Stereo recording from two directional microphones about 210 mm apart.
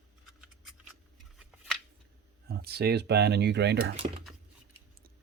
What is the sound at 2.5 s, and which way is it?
Speech, 50° right (ahead or behind).